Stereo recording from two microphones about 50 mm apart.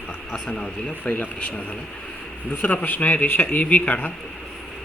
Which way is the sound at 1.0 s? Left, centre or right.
Left.